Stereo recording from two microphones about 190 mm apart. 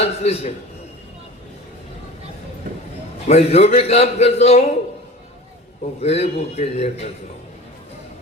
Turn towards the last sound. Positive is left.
turn(degrees=35)  # may be behind; listen again after turning